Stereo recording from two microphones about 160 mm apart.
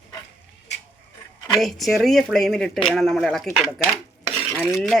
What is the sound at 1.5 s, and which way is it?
Speech, centre (ahead or behind).